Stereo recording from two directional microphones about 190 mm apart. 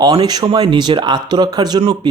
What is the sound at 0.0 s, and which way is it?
Speech, 20° right (ahead or behind).